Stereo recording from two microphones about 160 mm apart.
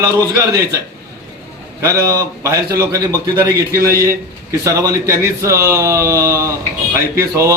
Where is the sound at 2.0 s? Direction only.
20° right (ahead or behind).